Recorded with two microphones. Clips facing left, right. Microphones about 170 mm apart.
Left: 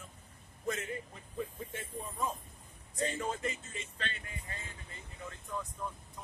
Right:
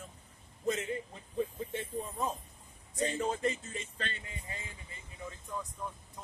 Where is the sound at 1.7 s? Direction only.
25° right (ahead or behind).